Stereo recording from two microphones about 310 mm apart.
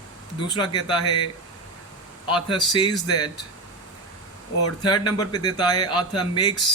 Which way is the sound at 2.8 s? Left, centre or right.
Centre.